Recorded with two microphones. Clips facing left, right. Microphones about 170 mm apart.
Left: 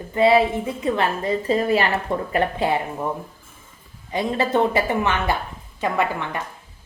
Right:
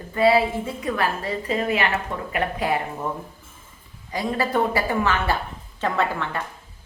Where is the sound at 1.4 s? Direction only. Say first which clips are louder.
Left 3 dB; 35° left (ahead or behind).